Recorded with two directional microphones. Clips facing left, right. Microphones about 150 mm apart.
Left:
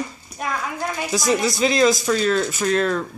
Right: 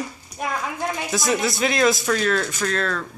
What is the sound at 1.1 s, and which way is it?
Speech, centre (ahead or behind).